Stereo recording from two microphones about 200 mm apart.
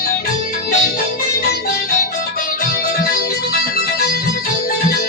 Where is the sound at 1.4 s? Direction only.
50° left (ahead or behind).